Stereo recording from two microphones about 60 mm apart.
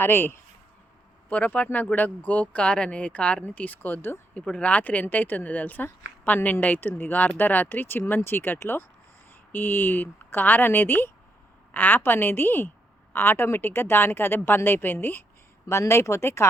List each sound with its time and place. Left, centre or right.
0.0 s speech: left
1.3 s speech: left
15.6 s speech: left